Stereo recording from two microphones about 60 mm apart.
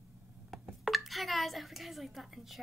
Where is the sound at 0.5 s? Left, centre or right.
Centre.